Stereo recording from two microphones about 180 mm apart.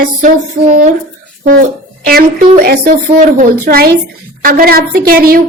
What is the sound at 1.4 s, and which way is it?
A woman's voice, 60° right (ahead or behind).